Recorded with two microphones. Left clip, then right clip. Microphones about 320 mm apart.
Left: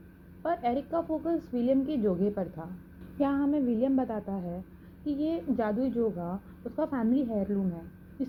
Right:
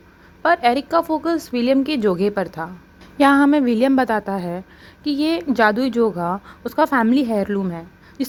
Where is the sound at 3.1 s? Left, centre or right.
Right.